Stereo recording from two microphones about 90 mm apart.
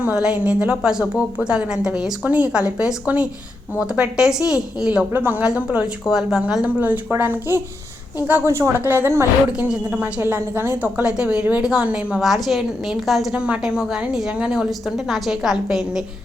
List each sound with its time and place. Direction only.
0.0 s a woman's voice: 15° right (ahead or behind)
5.1 s a woman's voice: 20° right (ahead or behind)
9.5 s a woman's voice: 15° right (ahead or behind)
11.0 s a woman's voice: 10° right (ahead or behind)
13.3 s a woman's voice: 10° right (ahead or behind)